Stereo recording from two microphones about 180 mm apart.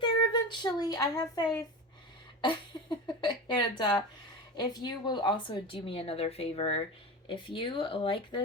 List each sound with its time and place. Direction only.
0.0 s child singing: 25° left (ahead or behind)
2.4 s speech: 25° left (ahead or behind)